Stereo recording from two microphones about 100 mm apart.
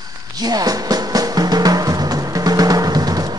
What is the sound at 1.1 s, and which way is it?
Drum, 40° right (ahead or behind).